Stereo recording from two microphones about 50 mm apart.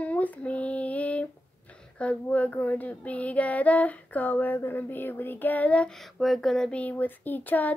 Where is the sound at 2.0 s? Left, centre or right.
Left.